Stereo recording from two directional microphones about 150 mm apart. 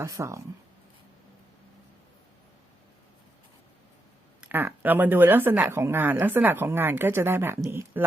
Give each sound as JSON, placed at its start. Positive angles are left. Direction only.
{"t": 0.0, "sound": "speech", "side_deg": -20}
{"t": 4.4, "sound": "speech", "side_deg": -15}